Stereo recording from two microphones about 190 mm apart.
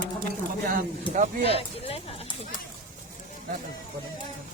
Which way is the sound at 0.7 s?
45° right (ahead or behind).